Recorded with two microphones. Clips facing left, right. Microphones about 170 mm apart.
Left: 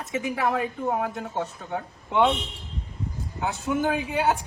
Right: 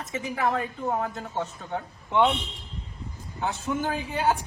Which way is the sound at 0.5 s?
10° left (ahead or behind).